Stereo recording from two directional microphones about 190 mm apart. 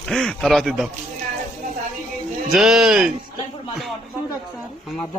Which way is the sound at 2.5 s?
Centre (ahead or behind).